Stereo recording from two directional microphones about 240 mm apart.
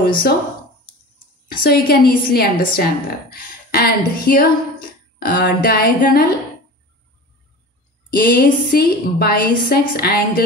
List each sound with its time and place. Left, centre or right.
0.0 s speech: left
1.6 s a woman's voice: left
8.1 s a woman's voice: left